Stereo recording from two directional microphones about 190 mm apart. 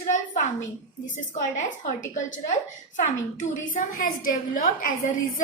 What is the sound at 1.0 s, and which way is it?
Speech, 40° left (ahead or behind).